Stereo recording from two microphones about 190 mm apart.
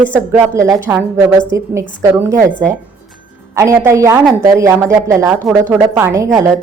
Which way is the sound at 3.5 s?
15° right (ahead or behind).